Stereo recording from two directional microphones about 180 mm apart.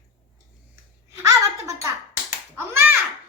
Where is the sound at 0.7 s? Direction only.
15° right (ahead or behind).